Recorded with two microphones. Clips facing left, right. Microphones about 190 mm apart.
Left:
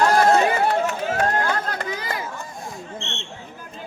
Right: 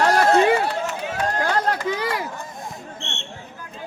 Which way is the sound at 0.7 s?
55° left (ahead or behind).